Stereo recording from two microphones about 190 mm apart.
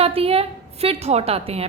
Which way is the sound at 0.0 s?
30° right (ahead or behind).